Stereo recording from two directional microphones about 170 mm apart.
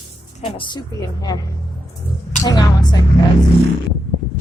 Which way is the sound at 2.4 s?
20° left (ahead or behind).